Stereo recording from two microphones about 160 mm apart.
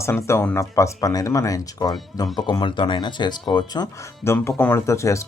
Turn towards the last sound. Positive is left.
turn(degrees=20)  # may be behind; listen again after turning